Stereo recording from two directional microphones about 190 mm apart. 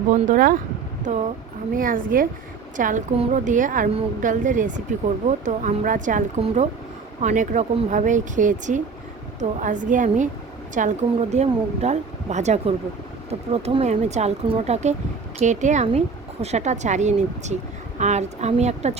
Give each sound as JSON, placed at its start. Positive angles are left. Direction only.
{"t": 0.1, "sound": "a woman's voice", "side_deg": -45}